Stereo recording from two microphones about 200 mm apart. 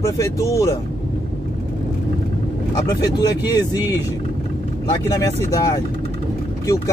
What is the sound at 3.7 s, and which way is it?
Speech, 20° left (ahead or behind).